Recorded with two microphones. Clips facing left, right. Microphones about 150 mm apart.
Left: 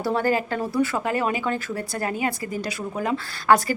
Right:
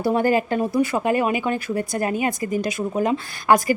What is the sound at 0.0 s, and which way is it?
Speech, 15° right (ahead or behind).